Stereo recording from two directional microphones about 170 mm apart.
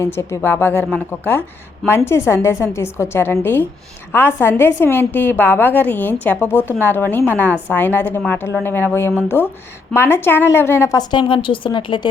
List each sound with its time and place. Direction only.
0.0 s a woman's voice: 15° left (ahead or behind)
2.0 s a woman's voice: 15° left (ahead or behind)